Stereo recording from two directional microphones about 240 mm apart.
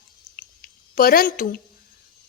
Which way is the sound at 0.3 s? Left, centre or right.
Left.